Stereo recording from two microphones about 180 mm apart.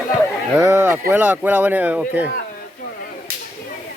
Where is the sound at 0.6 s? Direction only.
15° right (ahead or behind).